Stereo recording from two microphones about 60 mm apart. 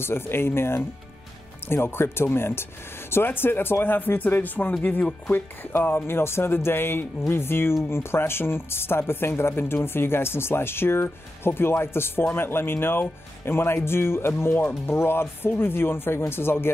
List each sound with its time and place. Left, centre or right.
0.0 s speech: left